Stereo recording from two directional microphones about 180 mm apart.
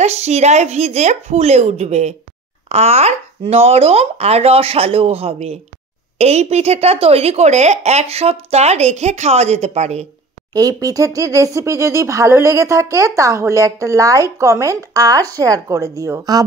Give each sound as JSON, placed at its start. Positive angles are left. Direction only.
{"t": 0.0, "sound": "speech", "side_deg": -40}
{"t": 10.5, "sound": "speech", "side_deg": -20}